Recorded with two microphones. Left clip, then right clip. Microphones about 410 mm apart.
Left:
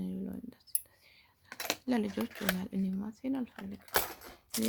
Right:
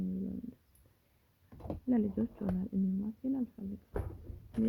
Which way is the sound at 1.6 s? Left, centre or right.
Centre.